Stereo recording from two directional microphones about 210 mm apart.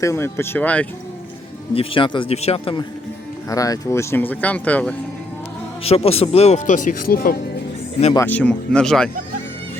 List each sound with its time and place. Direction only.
0.0 s speech: 15° left (ahead or behind)
1.7 s a man's voice: 25° left (ahead or behind)
3.5 s speech: 15° left (ahead or behind)
5.8 s speech: 30° left (ahead or behind); by 7.3 s 45° left (ahead or behind)
8.1 s speech: 10° left (ahead or behind)